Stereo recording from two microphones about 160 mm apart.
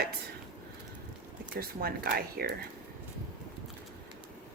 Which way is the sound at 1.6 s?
70° right (ahead or behind).